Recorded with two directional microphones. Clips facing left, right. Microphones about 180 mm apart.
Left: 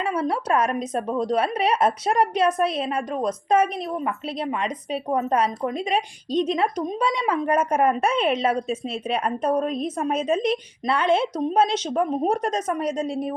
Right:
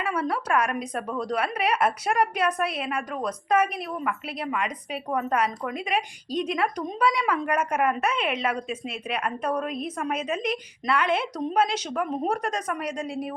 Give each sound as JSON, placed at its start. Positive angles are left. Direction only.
{"t": 0.0, "sound": "a woman's voice", "side_deg": 25}